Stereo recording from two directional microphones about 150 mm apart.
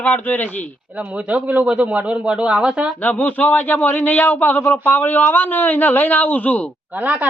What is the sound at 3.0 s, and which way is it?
Speech, 10° left (ahead or behind).